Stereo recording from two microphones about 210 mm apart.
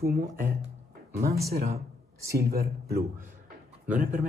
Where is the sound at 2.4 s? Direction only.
45° right (ahead or behind).